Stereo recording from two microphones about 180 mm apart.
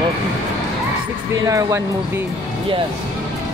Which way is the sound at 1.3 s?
20° right (ahead or behind).